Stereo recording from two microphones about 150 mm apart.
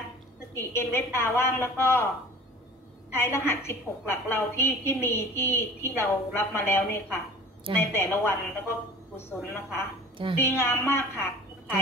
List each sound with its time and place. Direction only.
0.6 s a woman's voice: 15° left (ahead or behind)
3.1 s a woman's voice: 15° left (ahead or behind)